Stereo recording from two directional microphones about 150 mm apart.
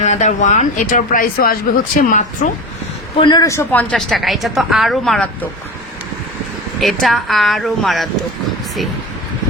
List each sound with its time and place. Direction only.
0.0 s speech: 50° left (ahead or behind)
3.2 s a man's voice: 30° left (ahead or behind)
3.4 s a woman's voice: 20° left (ahead or behind)
6.7 s a woman's voice: centre (ahead or behind)